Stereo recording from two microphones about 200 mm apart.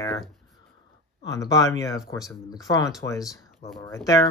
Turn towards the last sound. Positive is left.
turn(degrees=15)  # may be behind; listen again after turning